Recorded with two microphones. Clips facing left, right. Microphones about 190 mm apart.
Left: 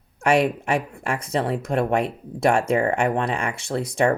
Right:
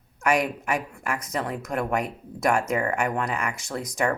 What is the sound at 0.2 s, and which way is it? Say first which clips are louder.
Speech: left 5 dB; 30° left (ahead or behind).